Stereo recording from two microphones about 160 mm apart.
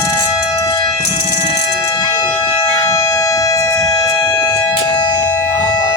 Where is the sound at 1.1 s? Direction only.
35° left (ahead or behind).